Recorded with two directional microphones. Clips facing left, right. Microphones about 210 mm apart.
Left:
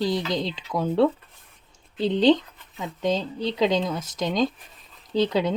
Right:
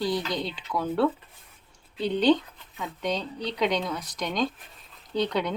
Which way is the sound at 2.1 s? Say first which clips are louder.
Left 3 dB; 25° left (ahead or behind).